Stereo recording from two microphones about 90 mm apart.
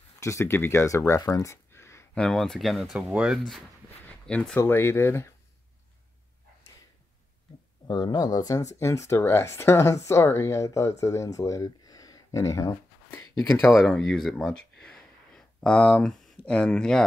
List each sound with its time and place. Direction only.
0.2 s speech: 30° left (ahead or behind)
2.1 s speech: 5° left (ahead or behind)
4.3 s speech: 15° left (ahead or behind)
4.6 s speech: 25° left (ahead or behind)
7.8 s speech: 50° left (ahead or behind)
13.8 s a sound: 5° left (ahead or behind)
16.1 s speech: 10° left (ahead or behind)